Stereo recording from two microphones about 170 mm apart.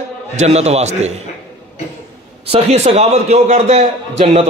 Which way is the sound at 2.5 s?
35° right (ahead or behind).